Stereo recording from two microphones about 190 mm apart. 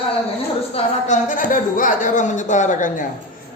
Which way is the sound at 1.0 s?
40° left (ahead or behind).